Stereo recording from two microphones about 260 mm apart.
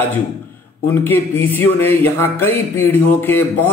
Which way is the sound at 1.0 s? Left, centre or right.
Centre.